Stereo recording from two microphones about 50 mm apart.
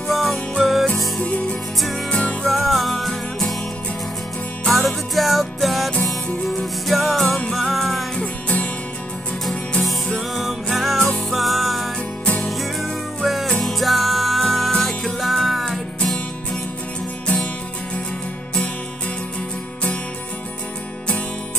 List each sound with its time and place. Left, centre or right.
0.1 s music: centre
1.2 s music: left
2.4 s music: centre
4.6 s music: centre
8.2 s music: left
9.5 s music: centre